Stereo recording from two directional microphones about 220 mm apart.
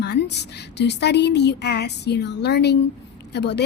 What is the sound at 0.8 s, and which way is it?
A woman's voice, 50° left (ahead or behind).